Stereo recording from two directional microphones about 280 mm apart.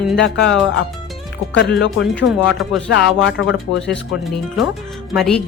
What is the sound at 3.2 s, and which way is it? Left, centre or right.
Speech, left.